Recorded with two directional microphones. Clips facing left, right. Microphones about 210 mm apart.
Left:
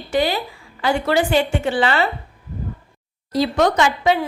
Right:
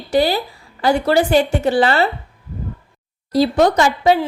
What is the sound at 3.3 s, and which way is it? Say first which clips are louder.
Speech: right 3 dB; 35° right (ahead or behind).